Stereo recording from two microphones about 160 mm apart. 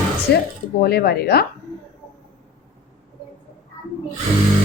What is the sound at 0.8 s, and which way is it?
Speech, 75° left (ahead or behind).